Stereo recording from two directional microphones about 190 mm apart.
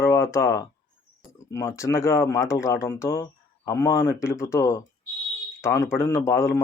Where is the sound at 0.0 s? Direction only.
15° left (ahead or behind).